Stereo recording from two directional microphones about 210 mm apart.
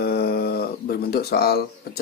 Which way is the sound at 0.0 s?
50° left (ahead or behind).